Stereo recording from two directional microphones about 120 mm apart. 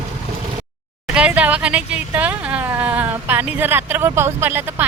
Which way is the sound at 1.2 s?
10° right (ahead or behind).